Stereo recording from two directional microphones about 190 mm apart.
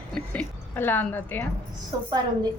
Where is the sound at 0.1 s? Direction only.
5° left (ahead or behind).